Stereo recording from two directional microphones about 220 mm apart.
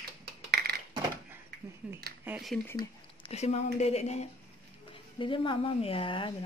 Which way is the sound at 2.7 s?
20° left (ahead or behind).